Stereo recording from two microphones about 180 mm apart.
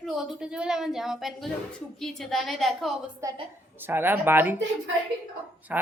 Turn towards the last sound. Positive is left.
turn(degrees=-10)  # may be behind; listen again after turning